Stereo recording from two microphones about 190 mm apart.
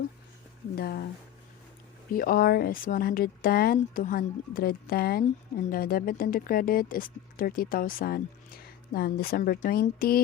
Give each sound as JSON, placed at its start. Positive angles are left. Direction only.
{"t": 0.8, "sound": "speech", "side_deg": 55}
{"t": 2.1, "sound": "speech", "side_deg": 50}